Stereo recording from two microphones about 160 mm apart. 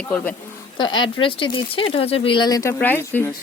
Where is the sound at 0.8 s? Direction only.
30° left (ahead or behind).